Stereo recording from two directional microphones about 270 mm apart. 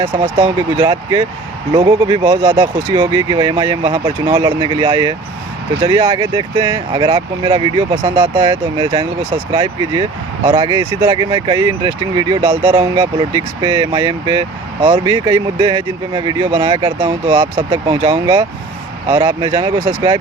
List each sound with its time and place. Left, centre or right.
0.0 s speech: centre